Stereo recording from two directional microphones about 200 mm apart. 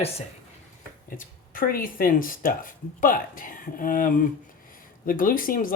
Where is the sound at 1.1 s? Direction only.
45° left (ahead or behind).